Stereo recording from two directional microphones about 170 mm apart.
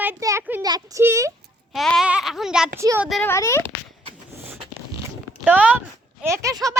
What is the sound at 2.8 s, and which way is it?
Speech, 15° right (ahead or behind).